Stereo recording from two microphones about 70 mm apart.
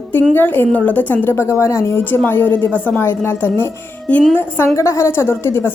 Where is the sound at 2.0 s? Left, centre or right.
Left.